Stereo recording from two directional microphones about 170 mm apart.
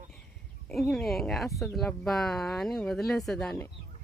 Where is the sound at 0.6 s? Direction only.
Centre (ahead or behind).